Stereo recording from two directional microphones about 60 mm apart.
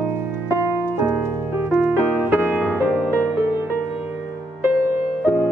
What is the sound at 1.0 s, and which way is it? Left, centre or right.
Music, right.